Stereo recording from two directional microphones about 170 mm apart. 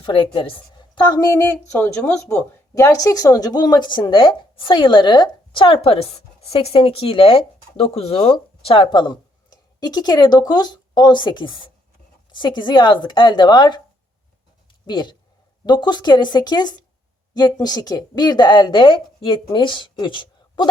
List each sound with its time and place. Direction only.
0.0 s a woman's voice: 30° left (ahead or behind)
14.8 s a woman's voice: 25° left (ahead or behind)